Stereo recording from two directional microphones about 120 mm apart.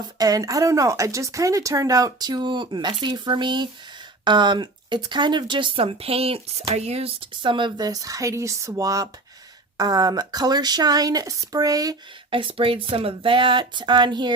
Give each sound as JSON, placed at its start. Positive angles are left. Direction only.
{"t": 0.2, "sound": "speech", "side_deg": -30}
{"t": 12.3, "sound": "speech", "side_deg": -45}